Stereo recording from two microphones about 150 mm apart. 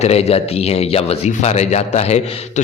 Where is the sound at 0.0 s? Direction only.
45° left (ahead or behind).